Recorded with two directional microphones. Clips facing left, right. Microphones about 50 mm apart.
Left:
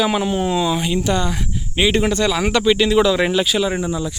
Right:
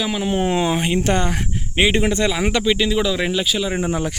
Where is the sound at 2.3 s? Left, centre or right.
Centre.